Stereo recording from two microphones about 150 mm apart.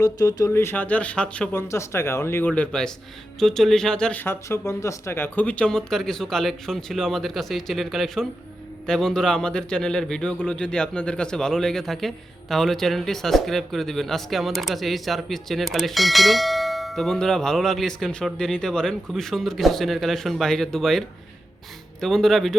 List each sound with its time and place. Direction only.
0.0 s speech: 25° left (ahead or behind); by 1.6 s 10° left (ahead or behind)
1.6 s speech: 20° left (ahead or behind)
2.5 s speech: 5° left (ahead or behind)
22.0 s speech: centre (ahead or behind)